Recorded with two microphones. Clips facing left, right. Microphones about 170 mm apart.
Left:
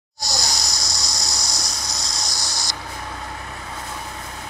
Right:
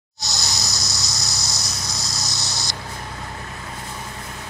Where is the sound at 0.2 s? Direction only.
20° right (ahead or behind).